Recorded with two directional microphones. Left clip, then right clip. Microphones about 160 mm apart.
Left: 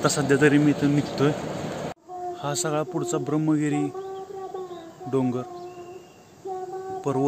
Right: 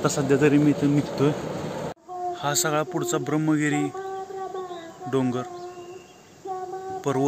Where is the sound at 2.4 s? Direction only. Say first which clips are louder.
Right 2 dB; 5° left (ahead or behind).